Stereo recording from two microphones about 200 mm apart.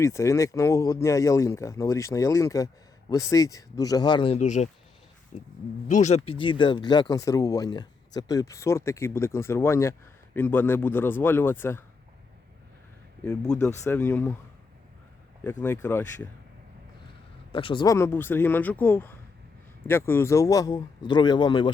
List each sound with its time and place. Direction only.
0.0 s speech: 15° left (ahead or behind); by 4.7 s 35° left (ahead or behind)
5.9 s speech: 35° left (ahead or behind); by 11.8 s 10° left (ahead or behind)
13.6 s speech: 15° left (ahead or behind)
15.6 s speech: 10° left (ahead or behind)
17.5 s speech: 25° left (ahead or behind)